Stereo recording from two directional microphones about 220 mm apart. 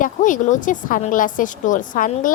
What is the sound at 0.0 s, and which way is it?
A woman's voice, 35° left (ahead or behind).